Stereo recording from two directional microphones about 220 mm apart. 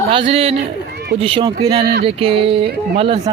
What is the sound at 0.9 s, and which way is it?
Run, 45° right (ahead or behind).